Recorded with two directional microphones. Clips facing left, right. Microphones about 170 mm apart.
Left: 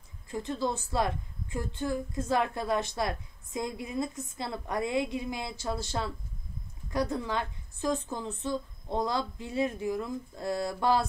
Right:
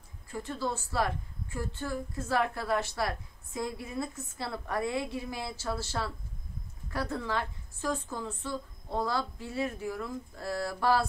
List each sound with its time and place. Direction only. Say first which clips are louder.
0.3 s a woman's voice: left 3 dB; 20° left (ahead or behind)